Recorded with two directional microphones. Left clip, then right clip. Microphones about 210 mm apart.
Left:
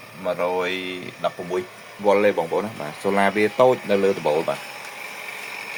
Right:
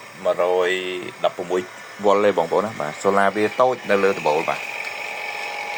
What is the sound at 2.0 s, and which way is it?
Speech, 15° right (ahead or behind).